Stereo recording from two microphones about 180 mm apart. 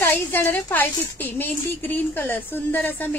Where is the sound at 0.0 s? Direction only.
10° left (ahead or behind).